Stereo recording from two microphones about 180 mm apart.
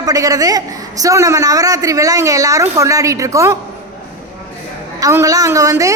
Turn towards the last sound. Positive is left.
turn(degrees=-20)  # may be behind; listen again after turning